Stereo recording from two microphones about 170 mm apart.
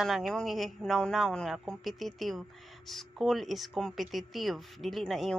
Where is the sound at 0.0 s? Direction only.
Centre (ahead or behind).